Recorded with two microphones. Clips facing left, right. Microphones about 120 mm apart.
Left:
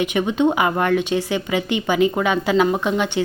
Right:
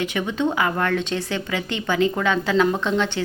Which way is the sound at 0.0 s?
15° left (ahead or behind).